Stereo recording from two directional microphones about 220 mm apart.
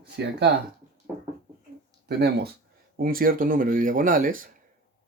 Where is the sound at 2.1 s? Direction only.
45° right (ahead or behind).